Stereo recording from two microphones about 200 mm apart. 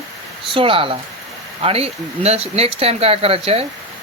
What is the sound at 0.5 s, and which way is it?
Speech, 25° right (ahead or behind).